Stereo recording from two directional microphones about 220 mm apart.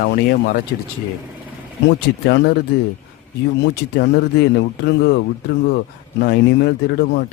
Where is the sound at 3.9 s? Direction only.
45° left (ahead or behind).